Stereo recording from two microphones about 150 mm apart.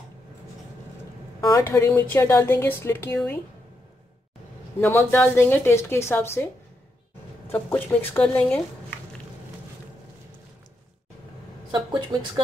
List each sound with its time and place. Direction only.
1.4 s a woman's voice: 20° left (ahead or behind)
4.7 s a woman's voice: 15° left (ahead or behind)